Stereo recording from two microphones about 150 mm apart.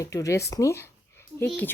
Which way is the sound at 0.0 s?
20° left (ahead or behind).